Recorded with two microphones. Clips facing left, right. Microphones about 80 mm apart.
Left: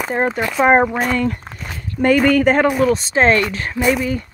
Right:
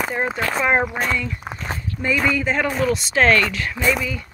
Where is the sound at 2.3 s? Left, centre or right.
Left.